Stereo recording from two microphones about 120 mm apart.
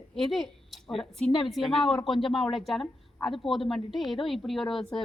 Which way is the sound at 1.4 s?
Centre (ahead or behind).